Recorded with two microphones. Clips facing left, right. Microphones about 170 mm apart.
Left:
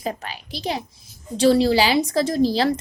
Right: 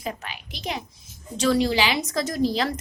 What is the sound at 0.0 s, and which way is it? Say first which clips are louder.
A child's voice: left 4 dB; 35° left (ahead or behind).